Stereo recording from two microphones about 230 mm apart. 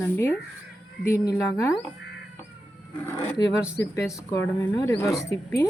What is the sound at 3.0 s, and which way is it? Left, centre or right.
Speech, centre.